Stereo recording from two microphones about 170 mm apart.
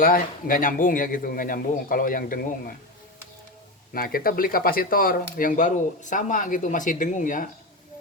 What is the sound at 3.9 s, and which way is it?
Speech, 60° left (ahead or behind).